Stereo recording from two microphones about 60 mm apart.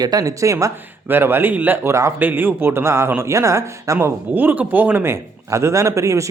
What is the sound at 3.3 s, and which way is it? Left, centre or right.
Speech, right.